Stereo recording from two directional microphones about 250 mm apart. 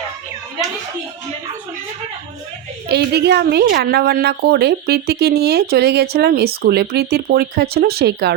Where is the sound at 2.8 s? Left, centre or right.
Right.